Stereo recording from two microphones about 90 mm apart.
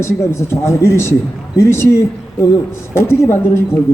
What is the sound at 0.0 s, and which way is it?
Speech, 30° left (ahead or behind).